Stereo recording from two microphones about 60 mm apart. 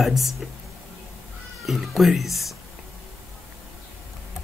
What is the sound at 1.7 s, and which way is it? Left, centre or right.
Speech, centre.